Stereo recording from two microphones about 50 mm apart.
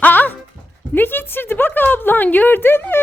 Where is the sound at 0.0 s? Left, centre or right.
Left.